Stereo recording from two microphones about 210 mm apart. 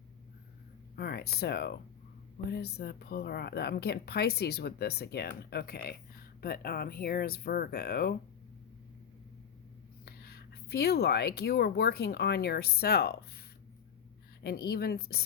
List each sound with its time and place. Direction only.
0.9 s speech: 50° left (ahead or behind)
10.1 s speech: 45° left (ahead or behind)
14.4 s speech: 45° left (ahead or behind)